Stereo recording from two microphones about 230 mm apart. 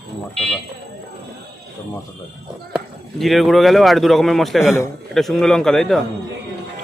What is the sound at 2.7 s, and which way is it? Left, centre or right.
Speech, centre.